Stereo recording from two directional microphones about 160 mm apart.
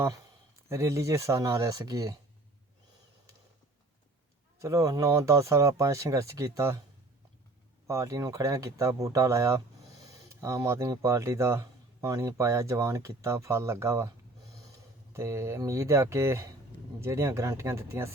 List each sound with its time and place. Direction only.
0.7 s speech: 15° right (ahead or behind)
4.6 s speech: 20° right (ahead or behind)
7.9 s speech: 20° right (ahead or behind)
15.1 s speech: 15° right (ahead or behind)